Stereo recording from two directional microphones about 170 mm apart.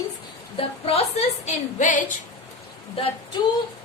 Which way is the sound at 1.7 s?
50° left (ahead or behind).